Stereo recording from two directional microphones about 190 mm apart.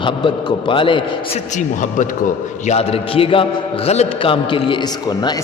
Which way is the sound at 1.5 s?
40° left (ahead or behind).